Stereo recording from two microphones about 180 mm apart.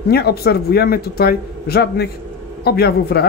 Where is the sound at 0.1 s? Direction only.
60° left (ahead or behind).